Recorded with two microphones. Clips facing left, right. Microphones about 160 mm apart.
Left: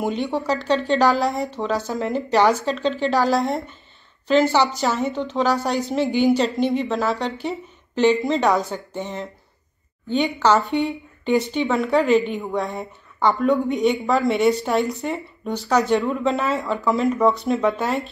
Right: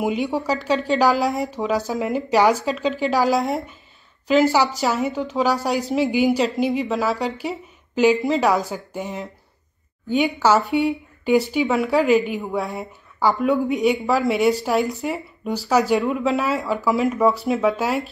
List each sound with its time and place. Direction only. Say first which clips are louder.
0.0 s a woman's voice: right 1 dB; 5° right (ahead or behind)